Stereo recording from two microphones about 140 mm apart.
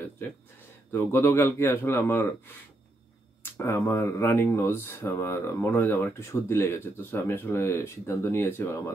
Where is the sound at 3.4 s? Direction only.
15° left (ahead or behind).